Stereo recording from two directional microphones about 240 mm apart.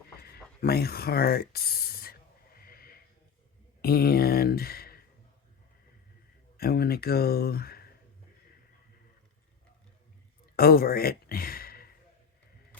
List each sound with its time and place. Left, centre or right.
0.2 s a sound: left
3.8 s speech: left
6.6 s speech: left
10.6 s speech: left